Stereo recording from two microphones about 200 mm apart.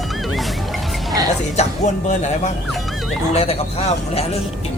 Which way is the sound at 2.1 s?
35° left (ahead or behind).